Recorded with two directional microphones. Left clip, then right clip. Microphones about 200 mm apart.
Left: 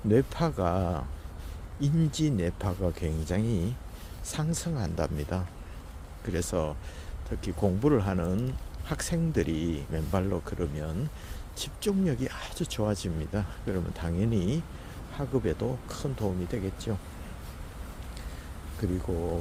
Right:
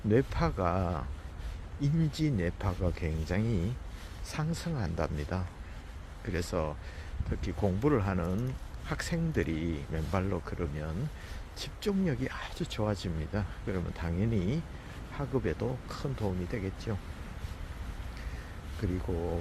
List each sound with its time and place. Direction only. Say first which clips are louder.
0.1 s speech: left 3 dB; 25° left (ahead or behind)
7.4 s speech: left 3 dB; 15° left (ahead or behind)
7.9 s speech: left 3 dB; 25° left (ahead or behind)
18.8 s speech: left 4 dB; 25° left (ahead or behind)